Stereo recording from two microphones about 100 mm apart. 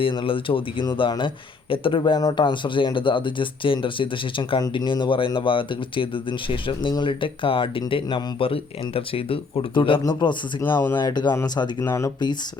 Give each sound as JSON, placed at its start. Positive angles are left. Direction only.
{"t": 0.0, "sound": "speech", "side_deg": 60}
{"t": 10.6, "sound": "speech", "side_deg": 20}
{"t": 10.9, "sound": "speech", "side_deg": 45}
{"t": 11.8, "sound": "speech", "side_deg": 30}